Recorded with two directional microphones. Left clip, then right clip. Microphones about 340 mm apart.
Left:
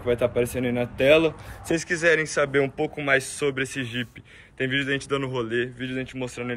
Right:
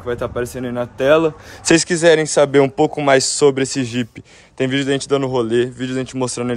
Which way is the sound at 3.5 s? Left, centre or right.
Centre.